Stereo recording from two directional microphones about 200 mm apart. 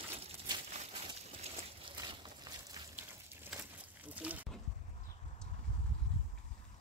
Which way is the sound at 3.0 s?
10° right (ahead or behind).